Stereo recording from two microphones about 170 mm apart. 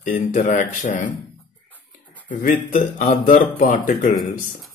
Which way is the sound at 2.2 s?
50° left (ahead or behind).